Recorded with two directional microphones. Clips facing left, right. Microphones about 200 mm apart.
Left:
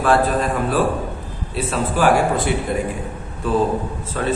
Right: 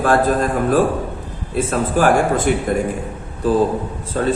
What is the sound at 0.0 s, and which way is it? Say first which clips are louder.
Speech: right 2 dB; 45° right (ahead or behind).